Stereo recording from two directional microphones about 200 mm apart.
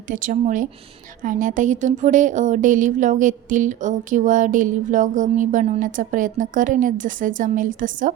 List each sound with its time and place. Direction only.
0.1 s speech: 40° right (ahead or behind)